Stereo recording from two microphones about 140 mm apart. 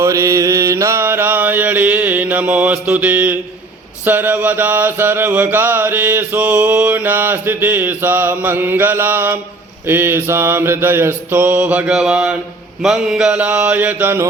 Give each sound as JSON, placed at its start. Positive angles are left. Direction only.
{"t": 0.0, "sound": "mantra", "side_deg": -20}